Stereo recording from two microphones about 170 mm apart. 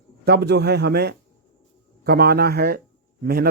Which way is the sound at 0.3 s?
75° right (ahead or behind).